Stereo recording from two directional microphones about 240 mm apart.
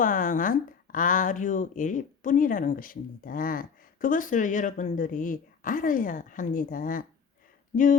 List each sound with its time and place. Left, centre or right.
0.0 s speech: left